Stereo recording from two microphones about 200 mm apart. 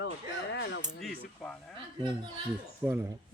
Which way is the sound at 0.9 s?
5° left (ahead or behind).